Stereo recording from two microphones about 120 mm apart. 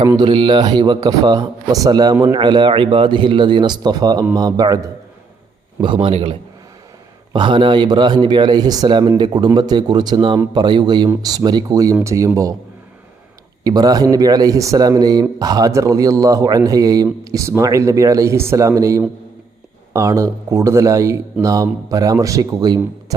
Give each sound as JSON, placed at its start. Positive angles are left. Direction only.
{"t": 0.2, "sound": "speech", "side_deg": -45}
{"t": 5.8, "sound": "a man's voice", "side_deg": -45}
{"t": 7.3, "sound": "speech", "side_deg": -40}
{"t": 13.7, "sound": "speech", "side_deg": -30}